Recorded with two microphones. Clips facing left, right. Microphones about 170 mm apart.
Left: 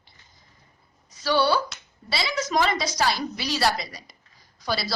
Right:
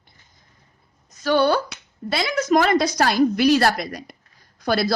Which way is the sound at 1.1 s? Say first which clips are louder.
Right 4 dB; 50° right (ahead or behind).